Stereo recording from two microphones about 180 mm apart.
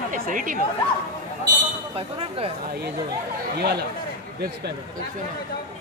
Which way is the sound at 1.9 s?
30° right (ahead or behind).